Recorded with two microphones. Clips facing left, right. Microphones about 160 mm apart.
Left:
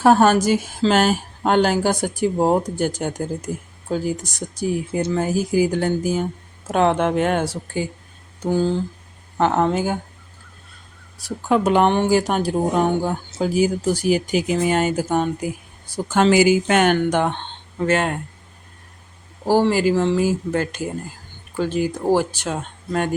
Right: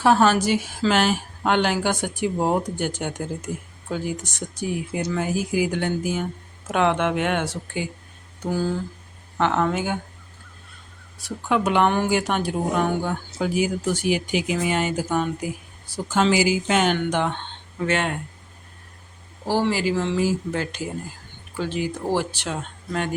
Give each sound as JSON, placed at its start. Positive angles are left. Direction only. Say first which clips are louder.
{"t": 0.0, "sound": "speech", "louder": "left 3 dB", "side_deg": 45}
{"t": 8.4, "sound": "a sound", "louder": "left 5 dB", "side_deg": 25}
{"t": 9.4, "sound": "speech", "louder": "left 3 dB", "side_deg": 40}
{"t": 11.2, "sound": "speech", "louder": "left 4 dB", "side_deg": 35}
{"t": 11.9, "sound": "a sound", "louder": "left 3 dB", "side_deg": 25}
{"t": 12.1, "sound": "speech", "louder": "left 4 dB", "side_deg": 35}
{"t": 19.5, "sound": "speech", "louder": "left 5 dB", "side_deg": 45}